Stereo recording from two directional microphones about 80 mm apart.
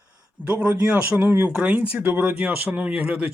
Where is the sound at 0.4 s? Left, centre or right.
Centre.